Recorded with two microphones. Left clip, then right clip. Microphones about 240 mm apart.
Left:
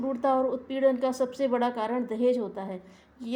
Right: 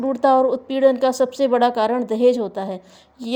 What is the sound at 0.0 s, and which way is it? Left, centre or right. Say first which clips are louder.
A woman's voice: right 10 dB; right.